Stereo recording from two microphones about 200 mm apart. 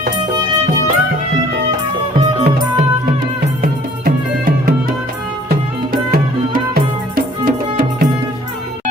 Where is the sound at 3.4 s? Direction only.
50° right (ahead or behind).